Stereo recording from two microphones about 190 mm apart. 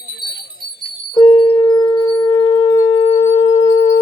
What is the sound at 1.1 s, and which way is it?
Singing bowl, 25° left (ahead or behind).